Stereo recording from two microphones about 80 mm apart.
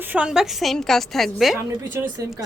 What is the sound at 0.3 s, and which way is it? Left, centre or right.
A woman's voice, centre.